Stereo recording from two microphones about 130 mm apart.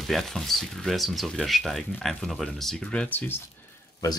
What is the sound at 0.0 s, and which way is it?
Speech, centre (ahead or behind).